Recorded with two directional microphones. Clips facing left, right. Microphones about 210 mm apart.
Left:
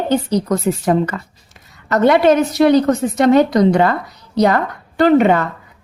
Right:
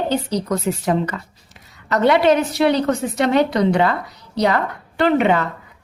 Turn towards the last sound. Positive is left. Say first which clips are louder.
# left 4 dB
turn(degrees=40)  # may be behind; listen again after turning